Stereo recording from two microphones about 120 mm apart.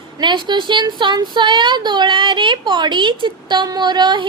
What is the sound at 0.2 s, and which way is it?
A woman's voice, 40° right (ahead or behind).